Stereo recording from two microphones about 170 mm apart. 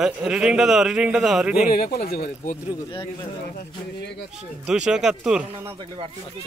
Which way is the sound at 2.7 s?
20° left (ahead or behind).